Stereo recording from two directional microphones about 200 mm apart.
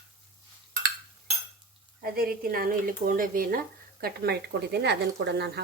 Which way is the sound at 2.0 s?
45° right (ahead or behind).